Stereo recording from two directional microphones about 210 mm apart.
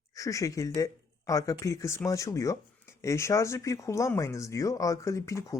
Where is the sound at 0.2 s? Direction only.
15° left (ahead or behind).